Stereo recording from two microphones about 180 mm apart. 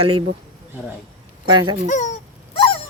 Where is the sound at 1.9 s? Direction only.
40° left (ahead or behind).